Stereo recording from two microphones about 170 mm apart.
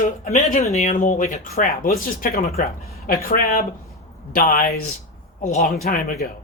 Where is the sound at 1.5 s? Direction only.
60° left (ahead or behind).